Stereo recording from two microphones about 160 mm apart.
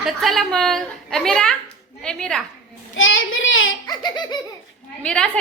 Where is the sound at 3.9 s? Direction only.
25° left (ahead or behind).